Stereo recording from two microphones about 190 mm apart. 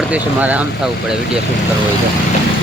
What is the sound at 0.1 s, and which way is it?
Speech, 10° right (ahead or behind).